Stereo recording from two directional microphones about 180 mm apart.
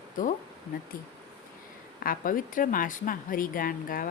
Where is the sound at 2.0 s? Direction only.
50° left (ahead or behind).